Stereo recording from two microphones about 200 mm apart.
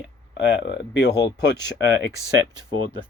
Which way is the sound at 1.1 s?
20° left (ahead or behind).